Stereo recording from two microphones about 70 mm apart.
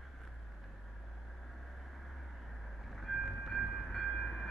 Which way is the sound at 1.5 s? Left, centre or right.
Centre.